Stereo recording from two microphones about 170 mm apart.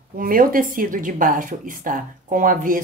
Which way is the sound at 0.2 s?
55° right (ahead or behind).